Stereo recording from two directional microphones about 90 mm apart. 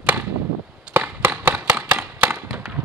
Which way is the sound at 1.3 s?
20° right (ahead or behind).